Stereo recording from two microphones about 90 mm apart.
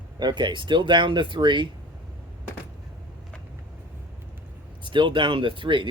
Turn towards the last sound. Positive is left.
turn(degrees=-65)  # may be behind; listen again after turning